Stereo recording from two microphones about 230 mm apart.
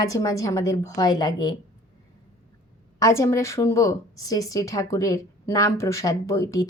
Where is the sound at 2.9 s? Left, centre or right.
Centre.